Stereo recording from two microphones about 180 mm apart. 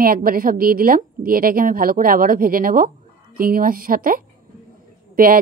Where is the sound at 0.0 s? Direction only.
55° right (ahead or behind).